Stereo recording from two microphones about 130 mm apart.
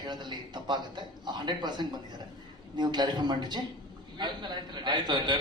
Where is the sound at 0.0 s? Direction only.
35° right (ahead or behind).